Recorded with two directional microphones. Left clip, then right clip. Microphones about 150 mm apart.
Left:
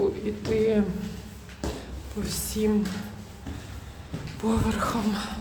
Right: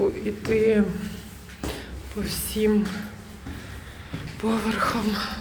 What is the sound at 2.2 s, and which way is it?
Speech, 5° left (ahead or behind).